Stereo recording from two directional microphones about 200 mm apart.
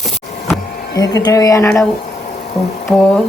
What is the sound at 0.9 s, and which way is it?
Speech, 15° left (ahead or behind).